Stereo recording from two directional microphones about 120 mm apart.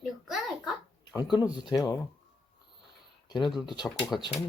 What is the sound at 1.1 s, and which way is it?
Speech, 35° left (ahead or behind).